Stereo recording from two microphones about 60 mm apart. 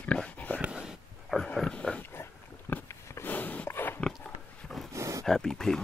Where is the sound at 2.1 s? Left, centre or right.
Left.